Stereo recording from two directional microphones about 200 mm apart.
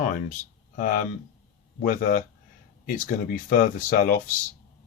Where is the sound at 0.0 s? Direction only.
40° left (ahead or behind).